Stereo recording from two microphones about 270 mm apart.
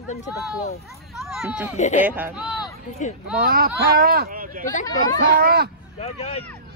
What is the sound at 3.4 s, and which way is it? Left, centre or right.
Speech, right.